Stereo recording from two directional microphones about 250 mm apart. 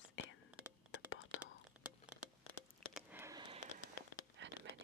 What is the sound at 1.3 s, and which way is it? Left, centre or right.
Whispering, left.